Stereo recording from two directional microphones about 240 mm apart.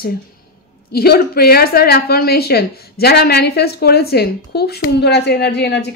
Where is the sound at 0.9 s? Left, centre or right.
Left.